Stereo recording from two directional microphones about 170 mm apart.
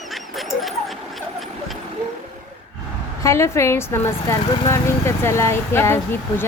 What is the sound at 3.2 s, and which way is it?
Speech, 15° left (ahead or behind).